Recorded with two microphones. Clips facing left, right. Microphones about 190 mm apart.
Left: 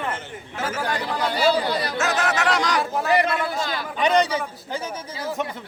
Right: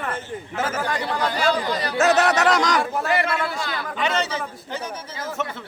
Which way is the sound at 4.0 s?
15° left (ahead or behind).